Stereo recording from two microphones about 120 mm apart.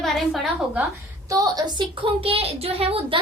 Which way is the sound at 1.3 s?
30° right (ahead or behind).